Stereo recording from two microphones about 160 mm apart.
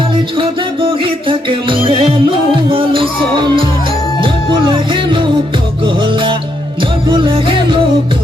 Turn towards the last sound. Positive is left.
turn(degrees=-30)  # may be behind; listen again after turning